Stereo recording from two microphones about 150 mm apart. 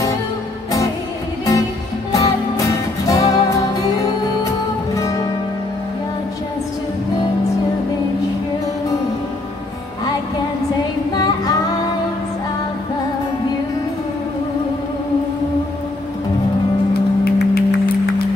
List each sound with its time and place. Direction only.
2.1 s music: 20° left (ahead or behind)
17.2 s music: 90° left